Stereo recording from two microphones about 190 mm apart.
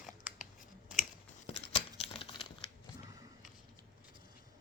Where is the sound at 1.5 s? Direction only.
30° left (ahead or behind).